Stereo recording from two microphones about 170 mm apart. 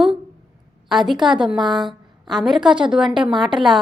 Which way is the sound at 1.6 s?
25° right (ahead or behind).